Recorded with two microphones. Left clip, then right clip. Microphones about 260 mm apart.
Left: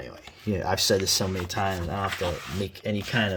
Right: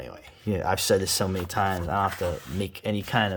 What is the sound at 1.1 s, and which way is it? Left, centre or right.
Speech, centre.